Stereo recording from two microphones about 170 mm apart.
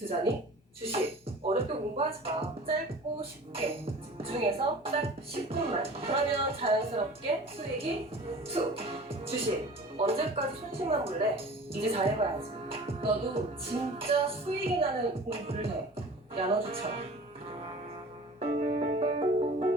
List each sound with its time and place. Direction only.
0.0 s a woman's voice: 35° right (ahead or behind)
1.5 s music: 35° right (ahead or behind)
4.2 s a woman's voice: 35° right (ahead or behind)
8.4 s a woman's voice: 35° right (ahead or behind)
18.3 s piano: 35° right (ahead or behind)